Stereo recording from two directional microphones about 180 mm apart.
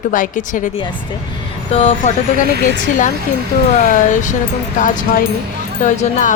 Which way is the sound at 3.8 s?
45° left (ahead or behind).